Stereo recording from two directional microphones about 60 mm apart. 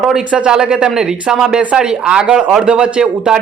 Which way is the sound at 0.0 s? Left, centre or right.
Centre.